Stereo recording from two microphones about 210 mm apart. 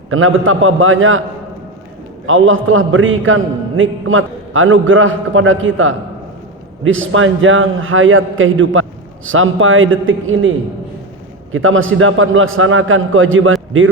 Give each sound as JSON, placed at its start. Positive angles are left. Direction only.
{"t": 0.1, "sound": "a man's voice", "side_deg": -70}
{"t": 2.2, "sound": "a man's voice", "side_deg": -70}
{"t": 11.5, "sound": "a man's voice", "side_deg": -70}